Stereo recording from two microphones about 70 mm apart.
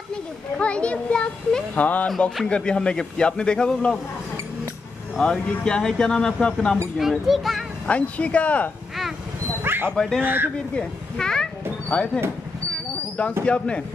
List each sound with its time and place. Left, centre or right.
0.6 s a man's voice: centre
2.0 s a man's voice: centre
5.2 s a man's voice: centre
7.0 s a child's voice: centre
7.8 s speech: centre
9.6 s dog: right
9.9 s a man's voice: centre
10.2 s speech: right
10.8 s a man's voice: centre
13.5 s a man's voice: centre